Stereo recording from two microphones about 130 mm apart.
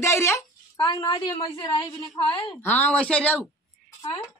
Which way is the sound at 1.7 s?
40° left (ahead or behind).